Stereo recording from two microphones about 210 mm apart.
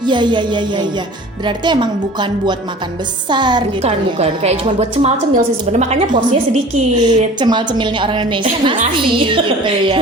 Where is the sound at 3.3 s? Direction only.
20° right (ahead or behind).